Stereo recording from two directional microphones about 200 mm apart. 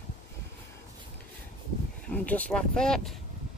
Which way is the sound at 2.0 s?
5° left (ahead or behind).